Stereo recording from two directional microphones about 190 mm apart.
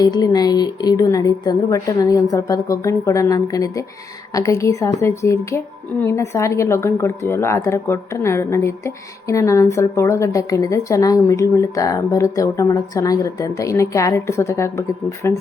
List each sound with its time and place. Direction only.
0.0 s a woman's voice: 20° left (ahead or behind)